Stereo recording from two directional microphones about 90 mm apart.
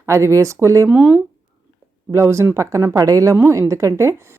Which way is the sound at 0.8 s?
15° right (ahead or behind).